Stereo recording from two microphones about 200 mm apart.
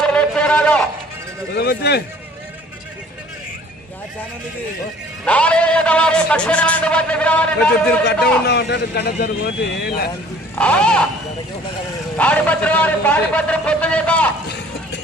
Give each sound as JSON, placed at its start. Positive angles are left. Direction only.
{"t": 0.0, "sound": "a sound", "side_deg": 5}
{"t": 1.5, "sound": "a man's voice", "side_deg": 55}
{"t": 5.2, "sound": "a man's voice", "side_deg": 5}
{"t": 8.4, "sound": "a man's voice", "side_deg": 55}
{"t": 10.5, "sound": "a man's voice", "side_deg": 5}
{"t": 12.1, "sound": "a man's voice", "side_deg": 5}